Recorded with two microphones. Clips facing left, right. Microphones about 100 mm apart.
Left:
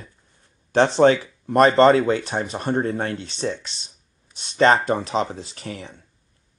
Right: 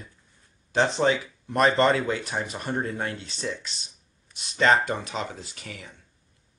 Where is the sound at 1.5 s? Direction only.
35° left (ahead or behind).